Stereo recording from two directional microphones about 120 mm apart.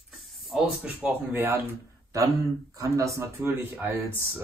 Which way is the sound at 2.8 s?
25° right (ahead or behind).